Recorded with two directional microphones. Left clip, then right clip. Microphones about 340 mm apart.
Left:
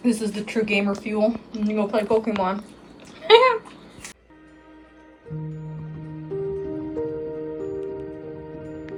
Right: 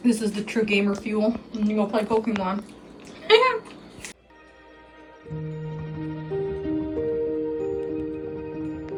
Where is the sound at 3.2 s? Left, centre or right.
Centre.